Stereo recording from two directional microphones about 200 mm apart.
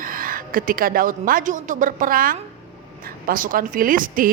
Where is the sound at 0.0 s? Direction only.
45° right (ahead or behind).